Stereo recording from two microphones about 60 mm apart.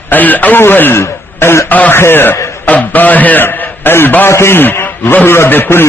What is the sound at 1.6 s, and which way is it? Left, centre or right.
Speech, left.